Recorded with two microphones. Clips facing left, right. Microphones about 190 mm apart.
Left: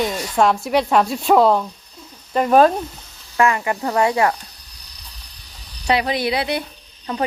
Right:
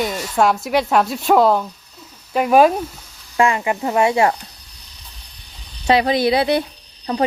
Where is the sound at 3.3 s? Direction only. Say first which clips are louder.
Right 1 dB; 20° right (ahead or behind).